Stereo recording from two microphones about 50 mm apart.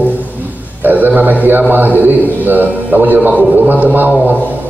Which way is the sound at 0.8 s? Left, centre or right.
Right.